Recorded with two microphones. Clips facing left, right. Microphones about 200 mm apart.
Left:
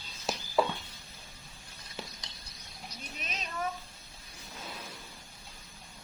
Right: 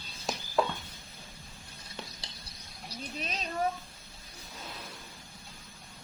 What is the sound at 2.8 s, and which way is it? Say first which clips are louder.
Bird: right 6 dB; 35° right (ahead or behind).